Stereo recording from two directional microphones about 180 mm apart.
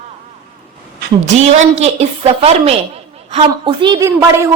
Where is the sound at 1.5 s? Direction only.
35° right (ahead or behind).